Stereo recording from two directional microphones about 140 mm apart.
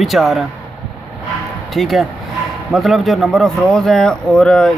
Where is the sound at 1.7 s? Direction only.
Centre (ahead or behind).